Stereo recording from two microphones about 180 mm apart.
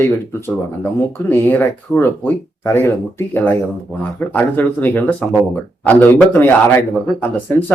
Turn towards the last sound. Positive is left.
turn(degrees=10)  # may be behind; listen again after turning